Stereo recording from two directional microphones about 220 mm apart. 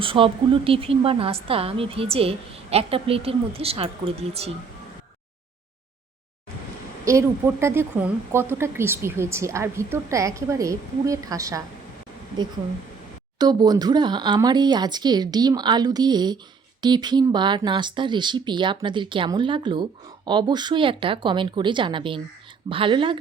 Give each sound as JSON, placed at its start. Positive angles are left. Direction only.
{"t": 0.0, "sound": "speech", "side_deg": -25}
{"t": 7.0, "sound": "speech", "side_deg": -15}
{"t": 13.4, "sound": "speech", "side_deg": -20}